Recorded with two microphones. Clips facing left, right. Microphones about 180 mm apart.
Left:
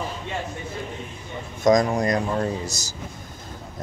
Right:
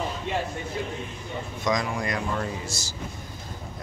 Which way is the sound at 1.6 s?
45° left (ahead or behind).